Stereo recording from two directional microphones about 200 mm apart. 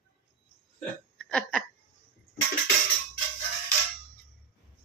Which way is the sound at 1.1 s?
5° left (ahead or behind).